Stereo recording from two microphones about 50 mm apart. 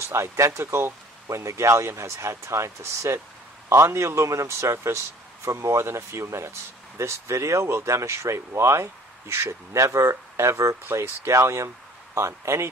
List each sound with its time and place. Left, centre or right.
0.1 s speech: right
10.8 s speech: right